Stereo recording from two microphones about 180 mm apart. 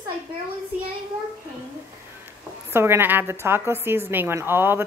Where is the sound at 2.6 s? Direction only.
15° right (ahead or behind).